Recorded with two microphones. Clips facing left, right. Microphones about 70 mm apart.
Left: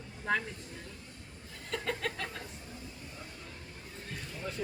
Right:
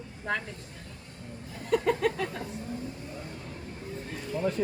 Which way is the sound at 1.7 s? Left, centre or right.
Centre.